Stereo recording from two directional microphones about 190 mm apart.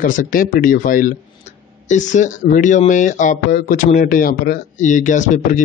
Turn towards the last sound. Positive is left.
turn(degrees=40)  # may be behind; listen again after turning